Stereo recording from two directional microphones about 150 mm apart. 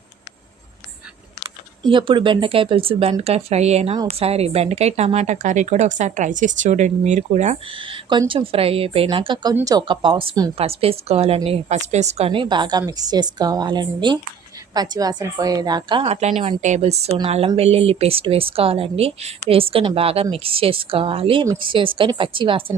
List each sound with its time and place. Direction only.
1.8 s speech: 35° right (ahead or behind); by 7.6 s 50° right (ahead or behind)
7.7 s a woman's voice: 35° right (ahead or behind)
16.4 s speech: 50° right (ahead or behind); by 22.6 s 35° right (ahead or behind)